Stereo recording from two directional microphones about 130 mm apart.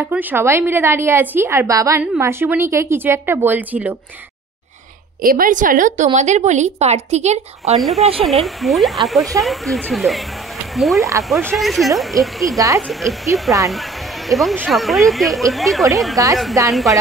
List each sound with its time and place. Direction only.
0.0 s a woman's voice: 10° right (ahead or behind)
5.2 s a woman's voice: 90° right
6.1 s speech: 65° right (ahead or behind)
7.7 s speech: centre (ahead or behind)
8.0 s speech: 45° right (ahead or behind)
8.3 s speech: centre (ahead or behind)
12.5 s a woman's voice: 25° right (ahead or behind)
12.8 s speech: centre (ahead or behind)
13.3 s a woman's voice: 25° right (ahead or behind)
13.7 s speech: centre (ahead or behind)
16.2 s a woman's voice: 25° right (ahead or behind)